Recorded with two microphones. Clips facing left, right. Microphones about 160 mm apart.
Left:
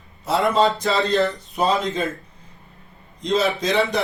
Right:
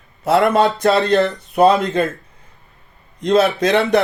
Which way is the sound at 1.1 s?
55° right (ahead or behind).